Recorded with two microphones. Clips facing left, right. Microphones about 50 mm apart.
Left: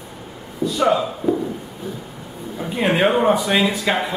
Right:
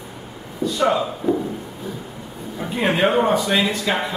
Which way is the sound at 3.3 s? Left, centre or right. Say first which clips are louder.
Left 1 dB; centre.